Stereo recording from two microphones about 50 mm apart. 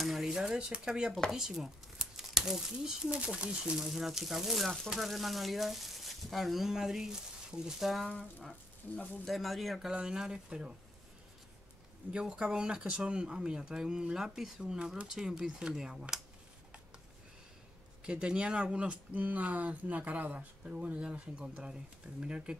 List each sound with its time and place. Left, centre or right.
0.0 s shuffling cards: centre
0.4 s speech: centre
3.3 s speech: right
3.8 s speech: centre
7.8 s speech: centre
9.3 s speech: centre
12.1 s speech: centre
18.2 s speech: centre
19.1 s speech: right